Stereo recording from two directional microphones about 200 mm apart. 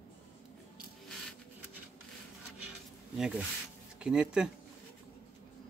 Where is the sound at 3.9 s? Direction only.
5° right (ahead or behind).